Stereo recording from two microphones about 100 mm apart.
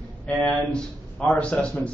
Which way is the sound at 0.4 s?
10° left (ahead or behind).